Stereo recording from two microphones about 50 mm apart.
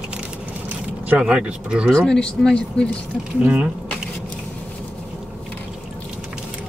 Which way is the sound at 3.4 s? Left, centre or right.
Right.